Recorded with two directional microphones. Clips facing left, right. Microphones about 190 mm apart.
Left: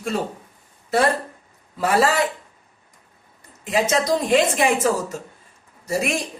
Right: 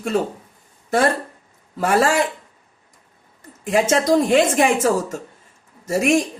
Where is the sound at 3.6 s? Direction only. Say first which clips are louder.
Right 3 dB; 50° right (ahead or behind).